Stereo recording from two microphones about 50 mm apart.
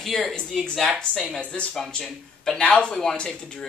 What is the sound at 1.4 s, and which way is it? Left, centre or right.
Speech, left.